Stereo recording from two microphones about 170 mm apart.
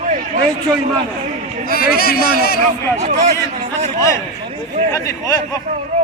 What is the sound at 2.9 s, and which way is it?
Speech, 40° right (ahead or behind).